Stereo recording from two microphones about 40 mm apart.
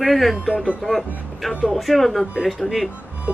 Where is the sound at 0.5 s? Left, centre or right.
Right.